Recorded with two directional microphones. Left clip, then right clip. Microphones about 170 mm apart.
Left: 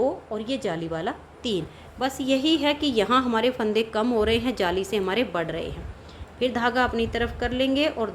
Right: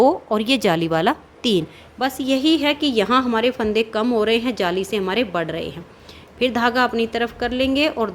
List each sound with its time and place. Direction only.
0.0 s a woman's voice: 55° right (ahead or behind)
2.0 s a woman's voice: 25° right (ahead or behind)